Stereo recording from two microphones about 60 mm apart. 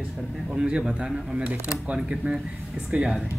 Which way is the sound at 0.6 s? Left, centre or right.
Centre.